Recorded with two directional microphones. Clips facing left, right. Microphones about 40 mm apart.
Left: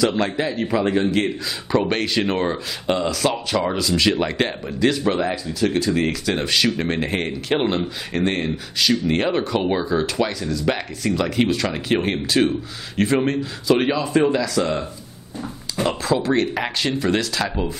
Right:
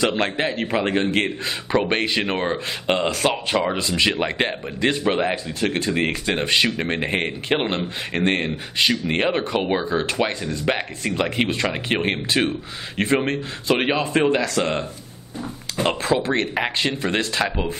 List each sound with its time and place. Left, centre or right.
0.0 s a man's voice: right
1.8 s speech: right
2.9 s a man's voice: right
7.7 s speech: right
14.3 s speech: right